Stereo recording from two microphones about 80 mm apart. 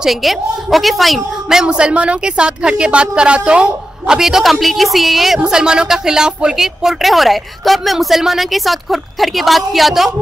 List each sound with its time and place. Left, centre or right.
0.0 s a woman's voice: centre